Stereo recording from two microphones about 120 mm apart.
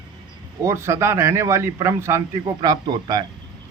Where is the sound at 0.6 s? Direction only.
25° right (ahead or behind).